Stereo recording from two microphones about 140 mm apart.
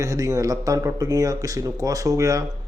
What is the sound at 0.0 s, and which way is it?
Speech, 25° right (ahead or behind).